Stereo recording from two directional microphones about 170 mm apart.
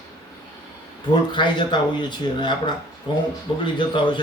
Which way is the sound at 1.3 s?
30° left (ahead or behind).